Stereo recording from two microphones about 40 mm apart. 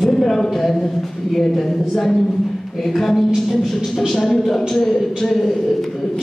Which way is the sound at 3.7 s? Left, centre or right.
Centre.